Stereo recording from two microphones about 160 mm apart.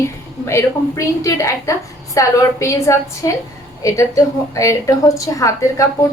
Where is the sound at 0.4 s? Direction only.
20° left (ahead or behind).